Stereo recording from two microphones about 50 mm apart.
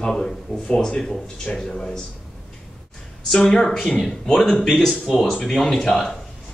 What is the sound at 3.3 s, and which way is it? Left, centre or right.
A man's voice, centre.